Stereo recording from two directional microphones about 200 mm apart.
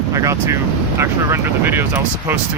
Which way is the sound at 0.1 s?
15° right (ahead or behind).